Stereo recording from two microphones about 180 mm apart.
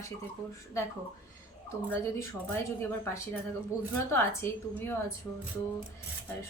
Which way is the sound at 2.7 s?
15° left (ahead or behind).